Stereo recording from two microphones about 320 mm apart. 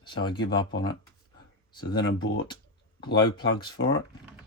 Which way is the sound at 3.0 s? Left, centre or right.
Centre.